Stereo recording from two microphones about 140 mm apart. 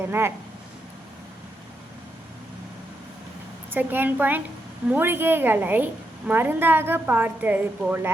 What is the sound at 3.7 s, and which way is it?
A woman's voice, 15° right (ahead or behind).